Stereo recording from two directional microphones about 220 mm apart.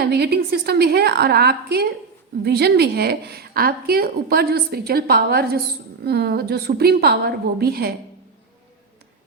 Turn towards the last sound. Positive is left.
turn(degrees=-45)  # may be behind; listen again after turning